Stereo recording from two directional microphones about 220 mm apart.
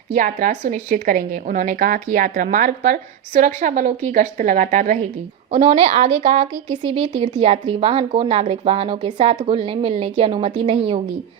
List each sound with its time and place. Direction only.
0.1 s a woman's voice: 40° right (ahead or behind)
5.5 s a woman's voice: 25° right (ahead or behind)